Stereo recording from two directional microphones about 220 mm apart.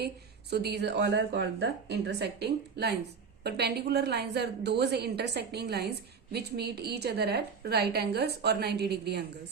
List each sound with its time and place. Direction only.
0.5 s a woman's voice: 50° right (ahead or behind)